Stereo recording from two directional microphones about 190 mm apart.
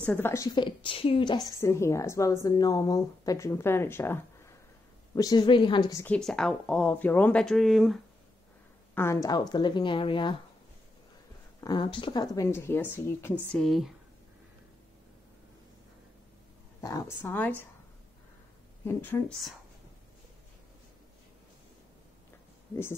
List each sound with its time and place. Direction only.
0.0 s a woman's voice: 10° left (ahead or behind)
6.1 s speech: 5° left (ahead or behind)
8.9 s a woman's voice: 15° left (ahead or behind)
11.6 s a woman's voice: 25° left (ahead or behind); by 13.9 s centre (ahead or behind)
16.8 s a woman's voice: 15° left (ahead or behind)
18.9 s a woman's voice: 10° left (ahead or behind)